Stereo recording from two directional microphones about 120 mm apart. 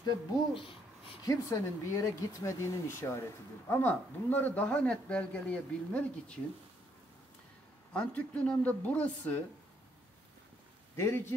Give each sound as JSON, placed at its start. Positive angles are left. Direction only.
{"t": 1.2, "sound": "a man's voice", "side_deg": 25}
{"t": 7.9, "sound": "a man's voice", "side_deg": 10}
{"t": 11.0, "sound": "speech", "side_deg": 20}